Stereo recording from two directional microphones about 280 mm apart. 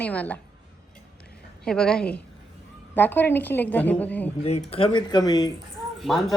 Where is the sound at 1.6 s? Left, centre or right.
Centre.